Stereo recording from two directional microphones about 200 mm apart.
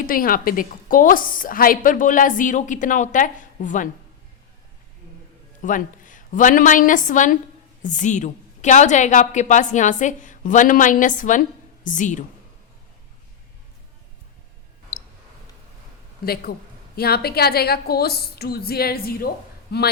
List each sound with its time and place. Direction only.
0.0 s a woman's voice: 45° left (ahead or behind)
5.6 s a woman's voice: 40° left (ahead or behind)
16.2 s a woman's voice: 50° left (ahead or behind)